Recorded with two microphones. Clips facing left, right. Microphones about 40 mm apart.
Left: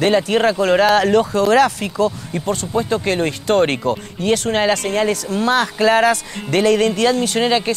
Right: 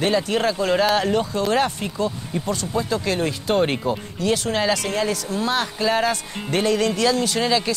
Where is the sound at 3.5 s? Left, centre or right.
Left.